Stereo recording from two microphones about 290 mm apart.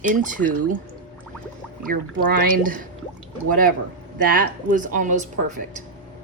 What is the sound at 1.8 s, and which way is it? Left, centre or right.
A woman's voice, right.